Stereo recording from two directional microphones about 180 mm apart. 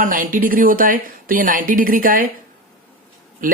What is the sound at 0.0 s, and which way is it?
Speech, 50° right (ahead or behind).